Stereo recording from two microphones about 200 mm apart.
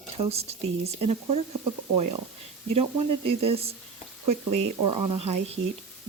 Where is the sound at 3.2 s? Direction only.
30° right (ahead or behind).